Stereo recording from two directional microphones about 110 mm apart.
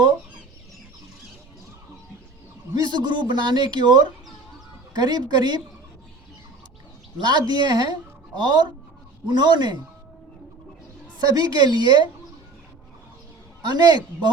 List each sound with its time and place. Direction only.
2.9 s a woman's voice: 45° right (ahead or behind)
7.2 s a woman's voice: 40° right (ahead or behind)
11.2 s a woman's voice: 35° right (ahead or behind)
13.7 s a woman's voice: 40° right (ahead or behind)